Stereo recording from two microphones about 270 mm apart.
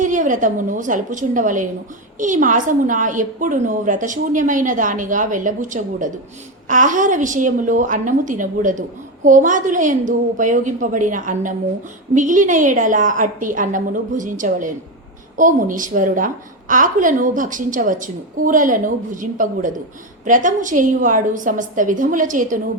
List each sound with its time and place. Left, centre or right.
0.0 s a woman's voice: right